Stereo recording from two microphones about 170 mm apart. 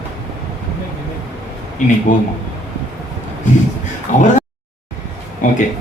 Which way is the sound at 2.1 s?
50° left (ahead or behind).